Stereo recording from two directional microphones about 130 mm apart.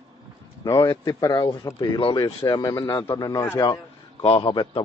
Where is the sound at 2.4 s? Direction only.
30° left (ahead or behind).